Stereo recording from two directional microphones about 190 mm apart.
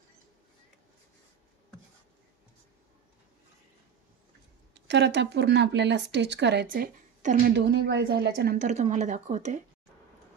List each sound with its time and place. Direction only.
4.7 s speech: 65° right (ahead or behind); by 7.5 s 45° right (ahead or behind)
7.5 s speech: 60° right (ahead or behind)
8.5 s speech: 40° right (ahead or behind)